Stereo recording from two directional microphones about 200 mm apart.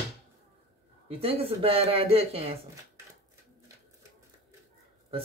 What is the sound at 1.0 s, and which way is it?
Speech, 30° right (ahead or behind).